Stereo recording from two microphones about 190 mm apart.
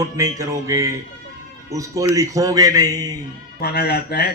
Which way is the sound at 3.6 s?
55° left (ahead or behind).